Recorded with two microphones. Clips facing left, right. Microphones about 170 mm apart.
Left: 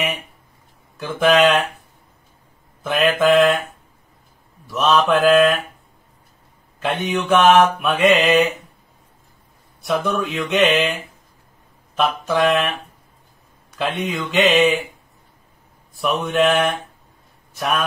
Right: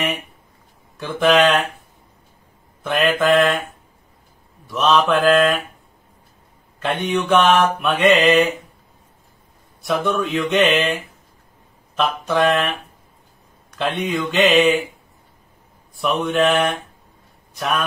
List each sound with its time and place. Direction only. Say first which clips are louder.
0.9 s speech: even; centre (ahead or behind)
2.8 s mantra: left 1 dB; centre (ahead or behind)
4.6 s mantra: even; centre (ahead or behind)
6.8 s mantra: right 1 dB; centre (ahead or behind)
9.8 s mantra: even; centre (ahead or behind)
11.9 s mantra: left 1 dB; centre (ahead or behind)
16.0 s mantra: even; centre (ahead or behind)